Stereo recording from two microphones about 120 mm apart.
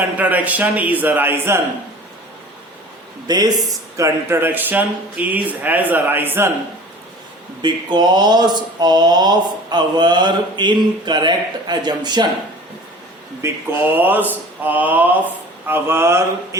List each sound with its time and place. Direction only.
0.2 s speech: 10° right (ahead or behind)
3.2 s speech: 35° right (ahead or behind)
3.9 s speech: 25° right (ahead or behind)
7.6 s speech: 40° right (ahead or behind)
13.4 s mantra: 25° right (ahead or behind)
13.9 s speech: 15° right (ahead or behind)
15.6 s mantra: 20° right (ahead or behind)